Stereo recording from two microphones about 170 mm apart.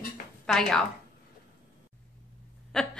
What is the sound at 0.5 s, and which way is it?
Speech, 5° left (ahead or behind).